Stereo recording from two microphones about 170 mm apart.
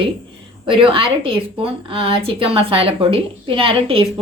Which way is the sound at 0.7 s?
30° right (ahead or behind).